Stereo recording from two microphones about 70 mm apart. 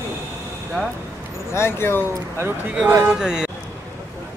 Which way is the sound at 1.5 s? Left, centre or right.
Left.